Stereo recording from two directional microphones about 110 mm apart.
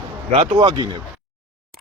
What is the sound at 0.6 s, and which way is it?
Speech, 40° right (ahead or behind).